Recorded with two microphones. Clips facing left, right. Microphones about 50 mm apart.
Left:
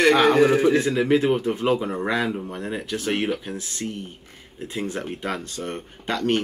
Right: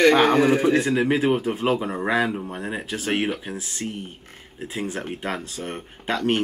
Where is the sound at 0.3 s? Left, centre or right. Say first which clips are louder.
Left 1 dB; centre.